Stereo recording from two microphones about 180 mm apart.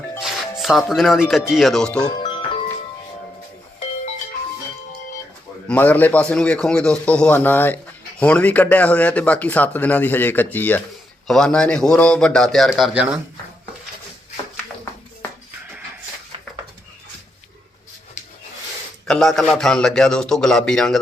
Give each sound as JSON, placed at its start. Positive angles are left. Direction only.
{"t": 0.2, "sound": "speech", "side_deg": 0}
{"t": 2.0, "sound": "music", "side_deg": 25}
{"t": 5.6, "sound": "a man's voice", "side_deg": 10}
{"t": 19.0, "sound": "a man's voice", "side_deg": 0}